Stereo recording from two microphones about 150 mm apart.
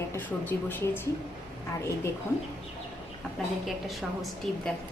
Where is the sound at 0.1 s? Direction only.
10° left (ahead or behind).